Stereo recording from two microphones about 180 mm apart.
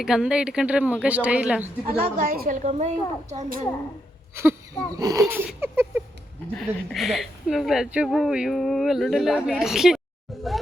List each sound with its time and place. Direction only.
0.0 s speech: 5° right (ahead or behind)
1.6 s a woman's voice: 45° right (ahead or behind)
4.9 s speech: 20° right (ahead or behind)
5.2 s speech: 5° right (ahead or behind)
6.5 s speech: centre (ahead or behind)